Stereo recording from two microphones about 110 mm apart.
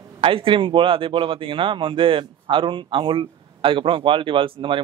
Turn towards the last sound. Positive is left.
turn(degrees=-50)  # may be behind; listen again after turning